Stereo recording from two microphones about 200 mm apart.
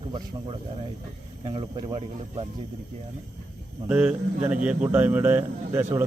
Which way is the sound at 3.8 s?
5° right (ahead or behind).